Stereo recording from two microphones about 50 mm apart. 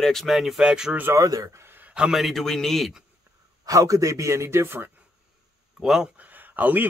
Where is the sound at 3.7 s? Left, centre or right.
Right.